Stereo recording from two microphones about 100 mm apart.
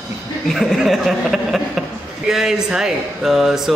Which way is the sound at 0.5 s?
Centre (ahead or behind).